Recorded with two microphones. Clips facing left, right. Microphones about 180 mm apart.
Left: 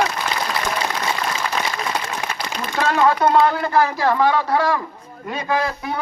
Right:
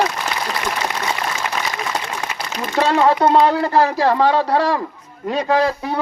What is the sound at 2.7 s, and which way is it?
Speech, 30° right (ahead or behind).